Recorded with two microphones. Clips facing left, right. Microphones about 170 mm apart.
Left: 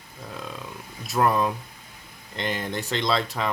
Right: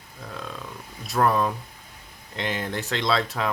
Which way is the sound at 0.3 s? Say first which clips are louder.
Even; 5° left (ahead or behind).